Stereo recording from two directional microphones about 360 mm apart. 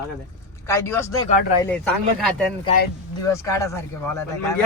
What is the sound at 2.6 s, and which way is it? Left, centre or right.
Speech, left.